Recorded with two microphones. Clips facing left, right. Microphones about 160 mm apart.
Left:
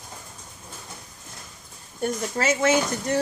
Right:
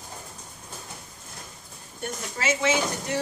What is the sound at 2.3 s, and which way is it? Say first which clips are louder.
Speech: left 3 dB; 45° left (ahead or behind).